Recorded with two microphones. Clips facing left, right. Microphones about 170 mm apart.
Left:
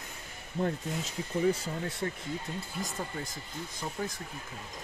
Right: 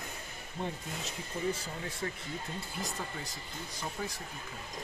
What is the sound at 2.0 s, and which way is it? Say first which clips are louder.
Speech: left 3 dB; 35° left (ahead or behind).